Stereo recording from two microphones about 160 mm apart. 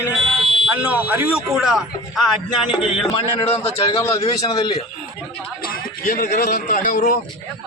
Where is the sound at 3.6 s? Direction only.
40° left (ahead or behind).